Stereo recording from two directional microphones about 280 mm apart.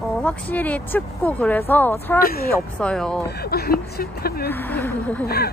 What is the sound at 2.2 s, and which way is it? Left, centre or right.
Speech, left.